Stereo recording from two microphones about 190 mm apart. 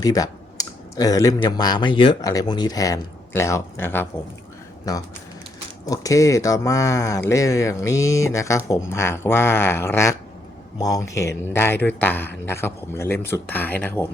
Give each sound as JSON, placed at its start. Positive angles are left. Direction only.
{"t": 0.0, "sound": "speech", "side_deg": 20}
{"t": 5.8, "sound": "speech", "side_deg": 20}